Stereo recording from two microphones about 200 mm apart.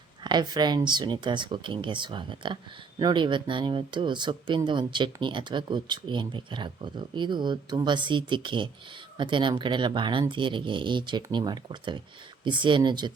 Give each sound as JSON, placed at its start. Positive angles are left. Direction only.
{"t": 0.2, "sound": "speech", "side_deg": -20}